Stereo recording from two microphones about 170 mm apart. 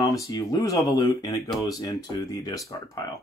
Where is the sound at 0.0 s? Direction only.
20° left (ahead or behind).